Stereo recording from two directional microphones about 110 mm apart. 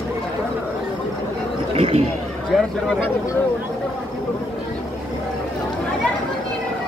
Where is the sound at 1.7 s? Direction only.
65° right (ahead or behind).